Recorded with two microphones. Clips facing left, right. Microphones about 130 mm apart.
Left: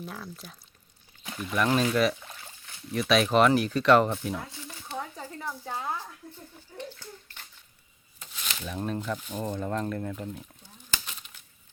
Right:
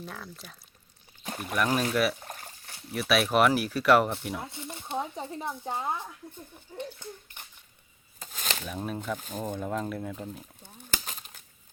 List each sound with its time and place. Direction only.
0.0 s speech: centre (ahead or behind)
1.2 s pour: 45° right (ahead or behind)
1.5 s speech: 10° right (ahead or behind)
2.1 s trickle: 45° right (ahead or behind)
2.9 s speech: 5° right (ahead or behind)
4.4 s a child's voice: 25° right (ahead or behind)
8.2 s a sound: 45° right (ahead or behind)
8.6 s speech: 5° right (ahead or behind)
9.1 s speech: 45° right (ahead or behind)
9.5 s speech: 5° right (ahead or behind)
10.6 s a sound: 50° right (ahead or behind)